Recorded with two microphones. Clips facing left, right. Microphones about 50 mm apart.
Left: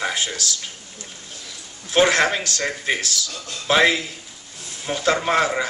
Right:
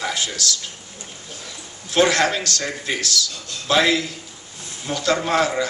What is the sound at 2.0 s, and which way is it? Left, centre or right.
A man's voice, left.